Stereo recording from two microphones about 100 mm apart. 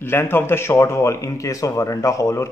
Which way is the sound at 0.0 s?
25° left (ahead or behind).